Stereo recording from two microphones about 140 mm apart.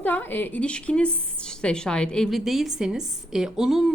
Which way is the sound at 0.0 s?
15° left (ahead or behind).